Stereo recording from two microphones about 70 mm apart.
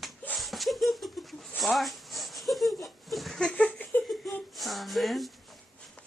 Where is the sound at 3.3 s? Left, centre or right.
Centre.